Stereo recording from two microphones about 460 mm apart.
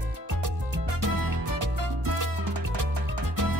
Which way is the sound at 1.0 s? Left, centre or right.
Right.